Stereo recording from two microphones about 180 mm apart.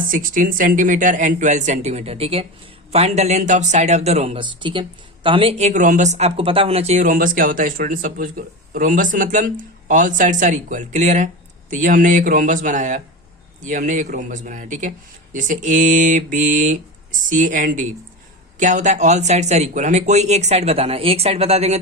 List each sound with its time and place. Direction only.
0.1 s speech: 50° right (ahead or behind)